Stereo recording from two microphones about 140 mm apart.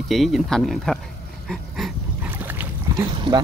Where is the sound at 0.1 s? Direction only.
Centre (ahead or behind).